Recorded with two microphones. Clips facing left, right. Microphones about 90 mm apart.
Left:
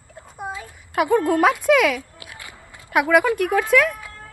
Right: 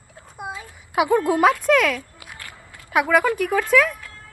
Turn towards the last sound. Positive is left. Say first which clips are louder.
# even
turn(degrees=5)  # may be behind; listen again after turning